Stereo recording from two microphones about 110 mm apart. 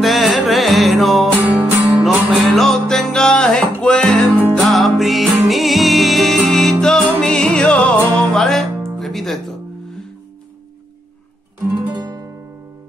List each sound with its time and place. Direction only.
0.0 s music: centre (ahead or behind)
11.9 s guitar: 40° right (ahead or behind)